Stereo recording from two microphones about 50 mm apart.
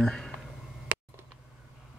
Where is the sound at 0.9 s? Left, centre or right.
Right.